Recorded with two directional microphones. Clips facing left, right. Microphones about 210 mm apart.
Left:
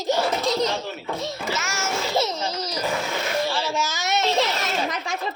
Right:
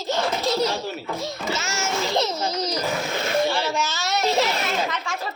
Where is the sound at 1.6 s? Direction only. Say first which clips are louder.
Right 1 dB; 25° right (ahead or behind).